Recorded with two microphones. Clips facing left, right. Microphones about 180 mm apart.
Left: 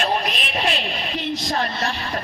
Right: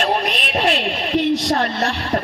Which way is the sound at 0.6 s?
65° right (ahead or behind).